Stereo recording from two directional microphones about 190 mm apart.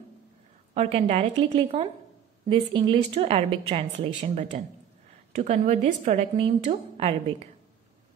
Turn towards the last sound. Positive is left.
turn(degrees=-35)  # may be behind; listen again after turning